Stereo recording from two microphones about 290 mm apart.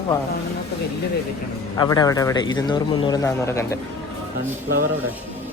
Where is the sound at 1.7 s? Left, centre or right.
Centre.